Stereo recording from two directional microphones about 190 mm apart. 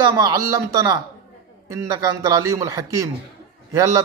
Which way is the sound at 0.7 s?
20° right (ahead or behind).